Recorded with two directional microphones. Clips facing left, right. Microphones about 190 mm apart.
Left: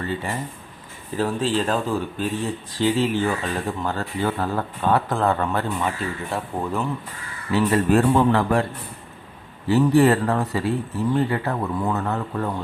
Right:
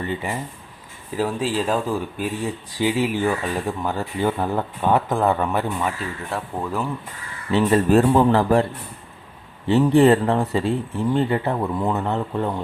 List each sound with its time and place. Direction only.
0.0 s speech: 15° right (ahead or behind)
6.0 s speech: centre (ahead or behind)
7.9 s speech: 35° right (ahead or behind)
9.6 s speech: 25° right (ahead or behind)